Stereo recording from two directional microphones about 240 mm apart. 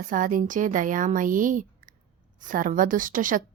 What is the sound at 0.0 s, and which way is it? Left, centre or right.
A woman's voice, right.